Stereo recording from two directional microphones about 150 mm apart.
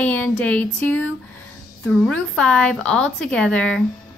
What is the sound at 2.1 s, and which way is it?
A woman's voice, 5° left (ahead or behind).